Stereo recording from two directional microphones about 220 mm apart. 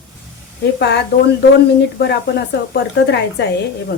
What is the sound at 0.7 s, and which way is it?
Speech, 50° left (ahead or behind).